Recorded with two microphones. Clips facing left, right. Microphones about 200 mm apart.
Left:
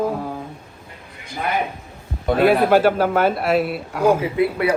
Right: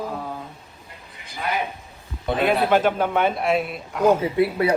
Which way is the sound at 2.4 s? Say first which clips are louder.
Left 4 dB; 10° left (ahead or behind).